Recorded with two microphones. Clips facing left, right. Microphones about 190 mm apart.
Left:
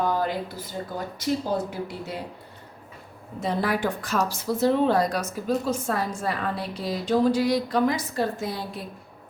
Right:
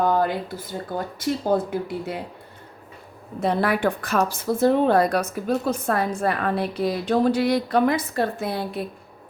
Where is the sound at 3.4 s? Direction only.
60° right (ahead or behind).